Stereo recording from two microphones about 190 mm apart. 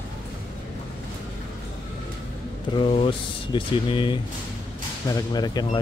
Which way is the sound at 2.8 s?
30° left (ahead or behind).